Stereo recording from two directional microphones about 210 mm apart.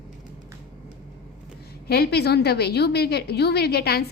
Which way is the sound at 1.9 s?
50° left (ahead or behind).